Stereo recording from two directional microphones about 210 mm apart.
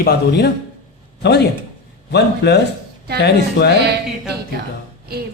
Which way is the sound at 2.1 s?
55° left (ahead or behind).